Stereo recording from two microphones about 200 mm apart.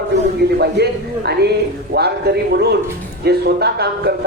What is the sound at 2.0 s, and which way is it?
A man's voice, 55° right (ahead or behind).